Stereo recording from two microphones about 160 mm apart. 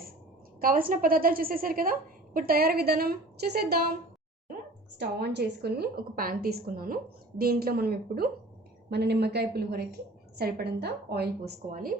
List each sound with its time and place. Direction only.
0.6 s a woman's voice: 65° right (ahead or behind)
4.9 s a woman's voice: 90° right; by 8.3 s 70° right (ahead or behind)
8.9 s a woman's voice: 90° right; by 11.9 s 65° right (ahead or behind)